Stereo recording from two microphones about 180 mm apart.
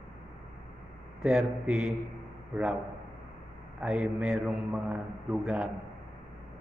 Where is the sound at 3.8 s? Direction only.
5° right (ahead or behind).